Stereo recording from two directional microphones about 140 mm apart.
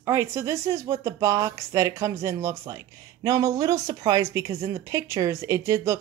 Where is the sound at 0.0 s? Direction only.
20° right (ahead or behind).